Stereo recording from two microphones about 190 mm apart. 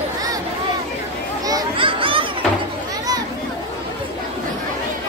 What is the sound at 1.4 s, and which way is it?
Children playing, 25° right (ahead or behind).